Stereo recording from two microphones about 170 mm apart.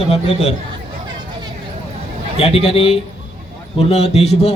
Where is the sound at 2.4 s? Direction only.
35° left (ahead or behind).